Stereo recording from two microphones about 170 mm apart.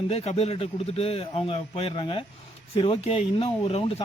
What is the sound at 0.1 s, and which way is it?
A man's voice, 40° left (ahead or behind).